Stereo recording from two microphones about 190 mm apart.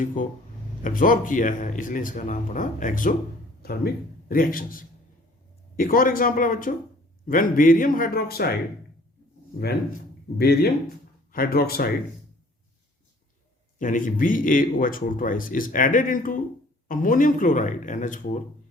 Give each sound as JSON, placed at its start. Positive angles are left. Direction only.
{"t": 0.0, "sound": "speech", "side_deg": 45}
{"t": 3.6, "sound": "speech", "side_deg": 55}
{"t": 10.3, "sound": "speech", "side_deg": 55}
{"t": 13.7, "sound": "speech", "side_deg": 45}